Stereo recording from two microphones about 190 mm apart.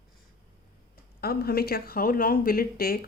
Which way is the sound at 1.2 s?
55° left (ahead or behind).